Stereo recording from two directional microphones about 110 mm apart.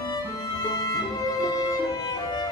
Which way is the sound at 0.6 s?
35° left (ahead or behind).